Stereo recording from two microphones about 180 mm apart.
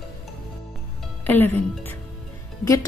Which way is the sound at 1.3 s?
10° left (ahead or behind).